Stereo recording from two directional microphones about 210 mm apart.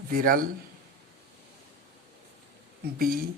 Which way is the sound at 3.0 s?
45° right (ahead or behind).